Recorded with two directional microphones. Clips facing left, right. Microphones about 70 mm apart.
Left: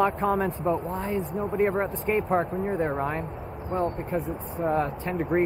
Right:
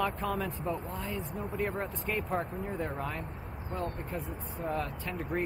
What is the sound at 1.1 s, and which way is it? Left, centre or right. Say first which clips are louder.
Speech: left 10 dB; left.